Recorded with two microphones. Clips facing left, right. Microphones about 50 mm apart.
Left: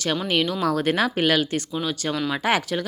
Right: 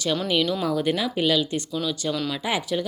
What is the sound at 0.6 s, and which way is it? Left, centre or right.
Speech, left.